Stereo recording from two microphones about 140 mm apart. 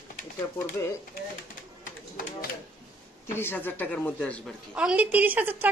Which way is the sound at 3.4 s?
15° left (ahead or behind).